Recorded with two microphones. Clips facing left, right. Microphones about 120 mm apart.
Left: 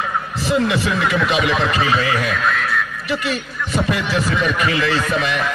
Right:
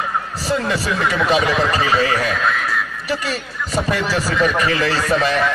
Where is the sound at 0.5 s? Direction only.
35° right (ahead or behind).